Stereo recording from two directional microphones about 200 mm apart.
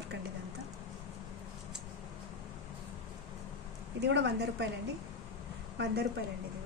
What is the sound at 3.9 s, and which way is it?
Speech, 60° right (ahead or behind).